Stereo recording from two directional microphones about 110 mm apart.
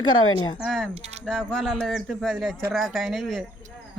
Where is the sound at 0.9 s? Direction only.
80° right.